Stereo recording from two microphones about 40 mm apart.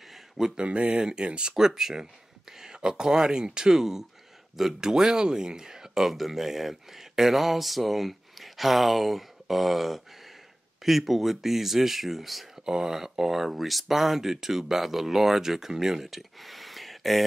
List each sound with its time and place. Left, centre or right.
0.6 s speech: right; by 12.4 s centre
12.6 s speech: centre